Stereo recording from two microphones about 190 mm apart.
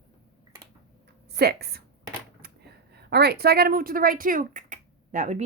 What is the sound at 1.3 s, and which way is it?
Speech, 55° right (ahead or behind).